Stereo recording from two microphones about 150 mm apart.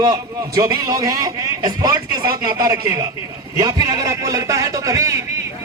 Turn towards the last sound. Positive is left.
turn(degrees=-20)  # may be behind; listen again after turning